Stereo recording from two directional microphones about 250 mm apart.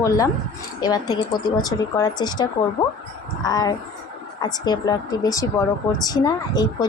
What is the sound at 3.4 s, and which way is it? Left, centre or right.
Speech, centre.